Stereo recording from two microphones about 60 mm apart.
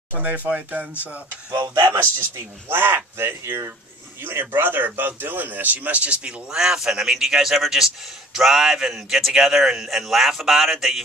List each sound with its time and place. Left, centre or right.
0.1 s speech: right
1.5 s speech: right
2.0 s speech: right
6.5 s a man's voice: centre